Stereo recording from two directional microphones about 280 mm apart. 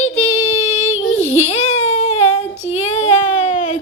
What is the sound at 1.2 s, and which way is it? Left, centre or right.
A woman's voice, left.